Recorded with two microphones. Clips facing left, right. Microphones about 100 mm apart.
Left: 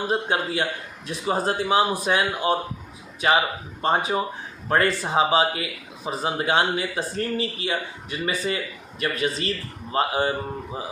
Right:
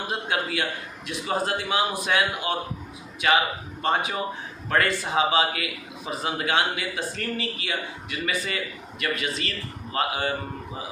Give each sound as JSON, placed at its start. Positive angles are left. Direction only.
{"t": 0.1, "sound": "speech", "side_deg": 30}